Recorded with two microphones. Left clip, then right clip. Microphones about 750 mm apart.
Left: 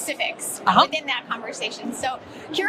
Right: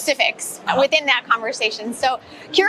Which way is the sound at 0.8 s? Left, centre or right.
Right.